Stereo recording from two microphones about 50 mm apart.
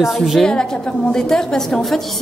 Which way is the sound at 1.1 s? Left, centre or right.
Centre.